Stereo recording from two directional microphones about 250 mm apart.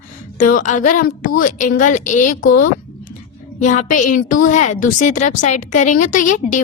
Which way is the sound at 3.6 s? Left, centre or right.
Left.